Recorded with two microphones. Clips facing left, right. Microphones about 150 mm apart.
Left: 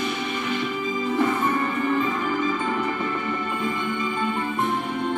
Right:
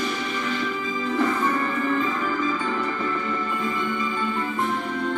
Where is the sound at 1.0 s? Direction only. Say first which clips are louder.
Even; 20° left (ahead or behind).